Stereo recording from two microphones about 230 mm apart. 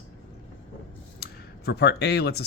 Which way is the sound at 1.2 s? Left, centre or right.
Left.